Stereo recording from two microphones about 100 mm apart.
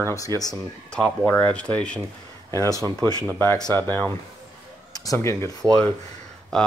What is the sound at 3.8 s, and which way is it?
Speech, 15° left (ahead or behind).